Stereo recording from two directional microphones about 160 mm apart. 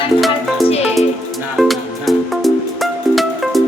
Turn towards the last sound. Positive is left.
turn(degrees=0)  # may be behind; listen again after turning